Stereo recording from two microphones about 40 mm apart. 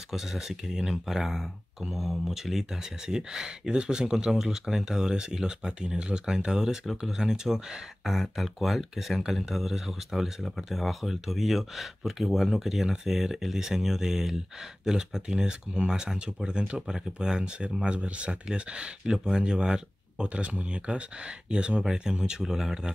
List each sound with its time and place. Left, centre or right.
0.1 s speech: centre
8.1 s speech: centre; by 16.7 s right
16.7 s speech: centre
17.8 s speech: right; by 22.9 s centre